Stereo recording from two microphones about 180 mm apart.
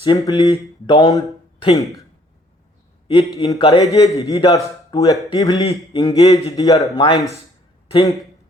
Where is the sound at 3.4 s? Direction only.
20° left (ahead or behind).